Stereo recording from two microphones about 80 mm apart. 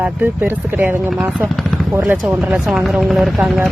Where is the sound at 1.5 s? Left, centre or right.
Centre.